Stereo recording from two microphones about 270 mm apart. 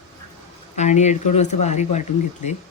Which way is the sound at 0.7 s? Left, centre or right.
Left.